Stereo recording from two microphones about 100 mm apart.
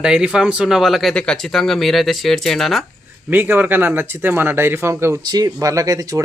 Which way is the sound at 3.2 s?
20° right (ahead or behind).